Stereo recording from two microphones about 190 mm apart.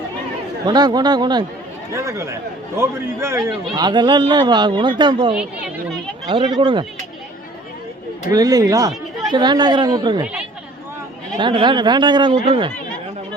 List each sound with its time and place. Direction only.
0.7 s speech: 20° right (ahead or behind)
5.4 s speech: 5° right (ahead or behind)
6.2 s speech: 25° right (ahead or behind)
8.3 s speech: 20° right (ahead or behind)
11.3 s speech: 25° right (ahead or behind)